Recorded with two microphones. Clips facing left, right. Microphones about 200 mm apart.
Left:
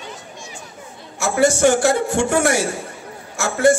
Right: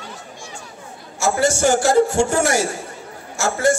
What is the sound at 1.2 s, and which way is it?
A man's voice, 60° left (ahead or behind).